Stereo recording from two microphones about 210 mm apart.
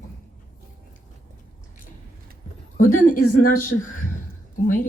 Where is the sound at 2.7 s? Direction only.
40° left (ahead or behind).